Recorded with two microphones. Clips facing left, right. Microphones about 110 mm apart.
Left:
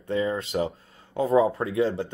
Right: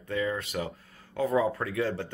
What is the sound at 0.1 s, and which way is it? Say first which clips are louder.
Speech: left 5 dB; 25° left (ahead or behind).